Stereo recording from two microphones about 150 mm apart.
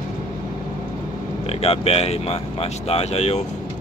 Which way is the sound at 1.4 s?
45° left (ahead or behind).